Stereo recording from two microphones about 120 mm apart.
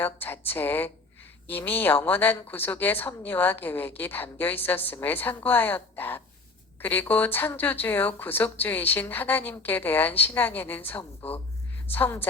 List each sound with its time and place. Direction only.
0.0 s a woman's voice: 15° left (ahead or behind)